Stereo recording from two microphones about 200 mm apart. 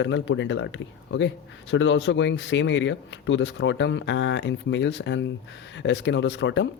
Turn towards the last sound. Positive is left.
turn(degrees=65)  # may be behind; listen again after turning